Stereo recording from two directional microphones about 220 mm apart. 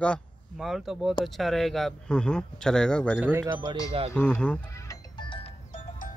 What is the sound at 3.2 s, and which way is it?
Speech, 10° right (ahead or behind).